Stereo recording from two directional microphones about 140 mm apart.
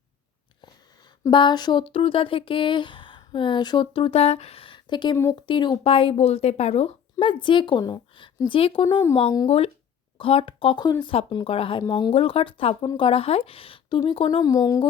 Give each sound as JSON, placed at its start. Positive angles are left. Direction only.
{"t": 0.6, "sound": "speech", "side_deg": 30}
{"t": 5.1, "sound": "speech", "side_deg": 20}
{"t": 5.5, "sound": "a woman's voice", "side_deg": 35}
{"t": 10.2, "sound": "a woman's voice", "side_deg": 40}
{"t": 11.8, "sound": "a woman's voice", "side_deg": 30}
{"t": 12.1, "sound": "a woman's voice", "side_deg": 40}
{"t": 14.4, "sound": "speech", "side_deg": 25}